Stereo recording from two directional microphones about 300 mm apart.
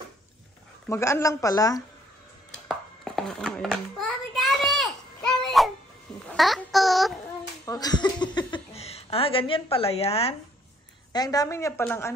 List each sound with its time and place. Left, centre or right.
0.8 s speech: centre
2.7 s a sound: centre
5.5 s babbling: centre
6.2 s a child's voice: centre
7.6 s speech: centre